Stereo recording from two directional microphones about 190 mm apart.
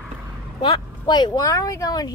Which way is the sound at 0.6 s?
25° left (ahead or behind).